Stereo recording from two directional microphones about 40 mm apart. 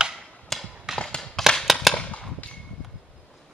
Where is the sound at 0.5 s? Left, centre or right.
Centre.